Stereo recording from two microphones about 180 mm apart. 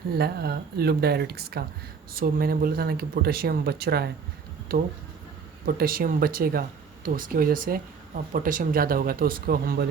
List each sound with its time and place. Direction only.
0.1 s speech: 60° right (ahead or behind)